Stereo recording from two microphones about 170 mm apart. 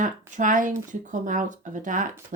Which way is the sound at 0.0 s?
50° right (ahead or behind).